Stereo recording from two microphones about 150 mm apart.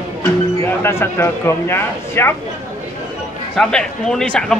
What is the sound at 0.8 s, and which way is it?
A man's voice, 15° left (ahead or behind).